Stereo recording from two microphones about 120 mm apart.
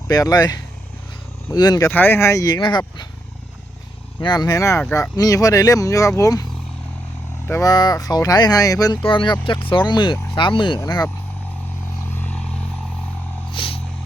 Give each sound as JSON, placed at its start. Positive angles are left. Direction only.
{"t": 0.1, "sound": "speech", "side_deg": 30}
{"t": 1.9, "sound": "speech", "side_deg": 15}
{"t": 4.2, "sound": "speech", "side_deg": 35}
{"t": 7.6, "sound": "speech", "side_deg": 35}
{"t": 9.0, "sound": "speech", "side_deg": 40}
{"t": 10.8, "sound": "speech", "side_deg": 30}
{"t": 12.1, "sound": "vehicle", "side_deg": 10}
{"t": 13.5, "sound": "a sound", "side_deg": 45}